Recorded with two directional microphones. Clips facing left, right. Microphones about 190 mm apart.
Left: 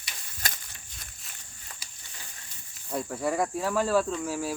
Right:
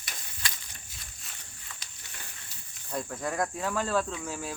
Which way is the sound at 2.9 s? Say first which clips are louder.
Left 4 dB; 10° left (ahead or behind).